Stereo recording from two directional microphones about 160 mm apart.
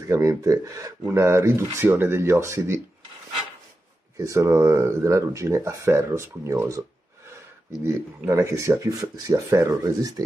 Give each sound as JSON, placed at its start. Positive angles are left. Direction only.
{"t": 0.0, "sound": "speech", "side_deg": -20}
{"t": 4.2, "sound": "speech", "side_deg": -20}
{"t": 7.8, "sound": "speech", "side_deg": -20}